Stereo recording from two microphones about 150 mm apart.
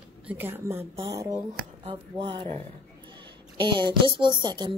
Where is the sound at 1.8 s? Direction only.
40° right (ahead or behind).